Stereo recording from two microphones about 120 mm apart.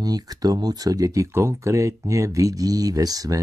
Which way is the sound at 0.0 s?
30° right (ahead or behind).